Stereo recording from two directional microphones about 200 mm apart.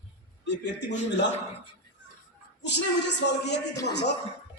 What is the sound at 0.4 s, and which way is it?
Speech, 60° left (ahead or behind).